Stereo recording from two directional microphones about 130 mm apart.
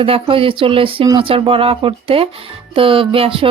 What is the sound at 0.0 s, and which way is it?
Speech, 45° right (ahead or behind).